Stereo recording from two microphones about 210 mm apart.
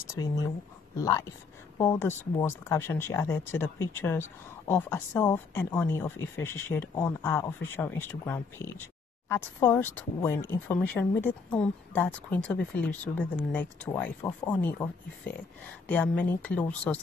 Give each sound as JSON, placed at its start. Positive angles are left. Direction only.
{"t": 0.1, "sound": "speech", "side_deg": 15}
{"t": 1.8, "sound": "speech", "side_deg": 10}
{"t": 15.9, "sound": "speech", "side_deg": 5}